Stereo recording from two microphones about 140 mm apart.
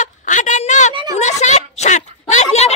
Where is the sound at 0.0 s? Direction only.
60° left (ahead or behind).